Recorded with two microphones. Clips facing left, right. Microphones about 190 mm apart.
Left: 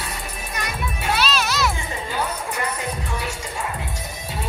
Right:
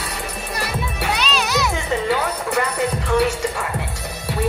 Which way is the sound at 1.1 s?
15° right (ahead or behind).